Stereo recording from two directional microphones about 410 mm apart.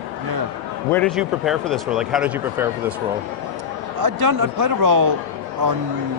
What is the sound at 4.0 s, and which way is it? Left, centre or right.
A man's voice, right.